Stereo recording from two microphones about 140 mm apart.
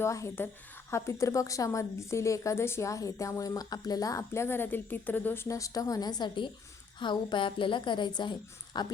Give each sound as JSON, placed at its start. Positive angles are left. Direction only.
{"t": 0.0, "sound": "a woman's voice", "side_deg": 20}